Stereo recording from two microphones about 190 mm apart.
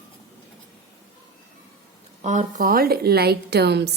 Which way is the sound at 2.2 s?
40° right (ahead or behind).